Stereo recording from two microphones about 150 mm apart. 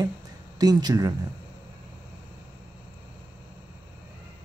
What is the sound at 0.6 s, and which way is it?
Speech, 25° right (ahead or behind).